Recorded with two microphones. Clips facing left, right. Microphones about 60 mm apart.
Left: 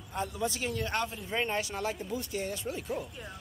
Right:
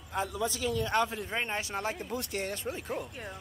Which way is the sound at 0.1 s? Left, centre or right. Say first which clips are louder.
Right 2 dB; right.